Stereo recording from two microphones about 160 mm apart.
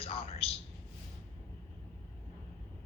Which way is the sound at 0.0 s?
35° left (ahead or behind).